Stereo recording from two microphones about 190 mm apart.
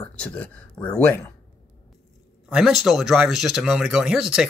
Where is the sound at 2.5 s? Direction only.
Centre (ahead or behind).